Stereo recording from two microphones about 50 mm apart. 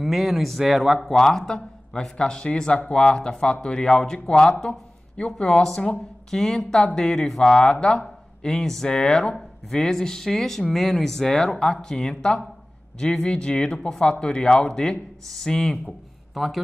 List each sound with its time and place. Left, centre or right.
0.0 s speech: centre
2.1 s speech: centre
16.3 s speech: centre